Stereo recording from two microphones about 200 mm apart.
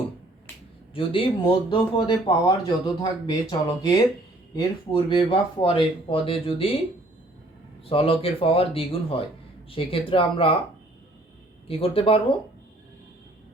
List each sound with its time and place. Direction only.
0.9 s speech: 25° left (ahead or behind)
4.5 s speech: 25° left (ahead or behind)
7.9 s speech: 30° left (ahead or behind)
11.7 s speech: 30° left (ahead or behind)